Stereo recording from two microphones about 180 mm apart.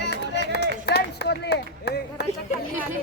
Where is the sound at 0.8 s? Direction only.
65° left (ahead or behind).